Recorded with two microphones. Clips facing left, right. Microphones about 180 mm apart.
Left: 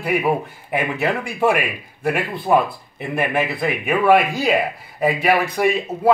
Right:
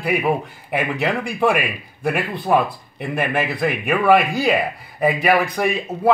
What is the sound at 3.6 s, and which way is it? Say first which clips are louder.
A man's voice: even; centre (ahead or behind).